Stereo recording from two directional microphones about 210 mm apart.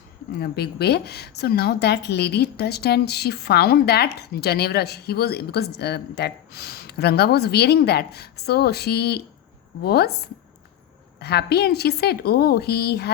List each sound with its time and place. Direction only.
0.3 s a woman's voice: 50° left (ahead or behind)